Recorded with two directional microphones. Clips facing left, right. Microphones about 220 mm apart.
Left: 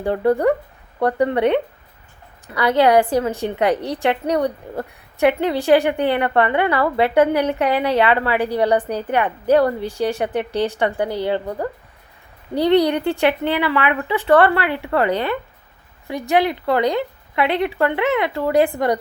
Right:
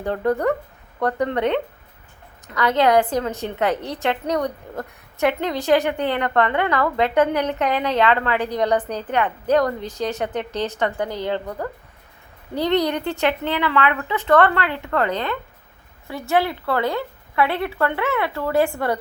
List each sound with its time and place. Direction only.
0.0 s a woman's voice: 10° left (ahead or behind)
12.5 s a woman's voice: 10° left (ahead or behind)